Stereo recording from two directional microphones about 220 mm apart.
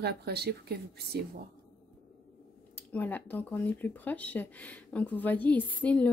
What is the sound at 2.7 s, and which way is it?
Speech, 10° left (ahead or behind).